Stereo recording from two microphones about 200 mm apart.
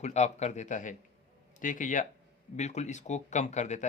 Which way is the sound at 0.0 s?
35° left (ahead or behind).